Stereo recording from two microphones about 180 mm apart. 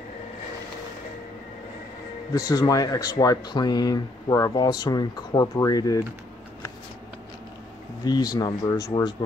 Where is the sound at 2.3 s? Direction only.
20° left (ahead or behind).